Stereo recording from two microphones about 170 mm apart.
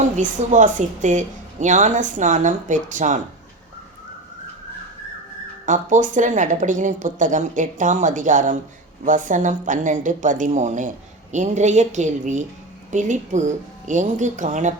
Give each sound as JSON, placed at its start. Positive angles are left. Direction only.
{"t": 0.0, "sound": "a woman's voice", "side_deg": -45}
{"t": 5.6, "sound": "a woman's voice", "side_deg": -50}